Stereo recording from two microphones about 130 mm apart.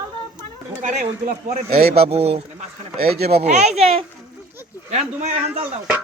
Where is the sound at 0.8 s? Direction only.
70° right (ahead or behind).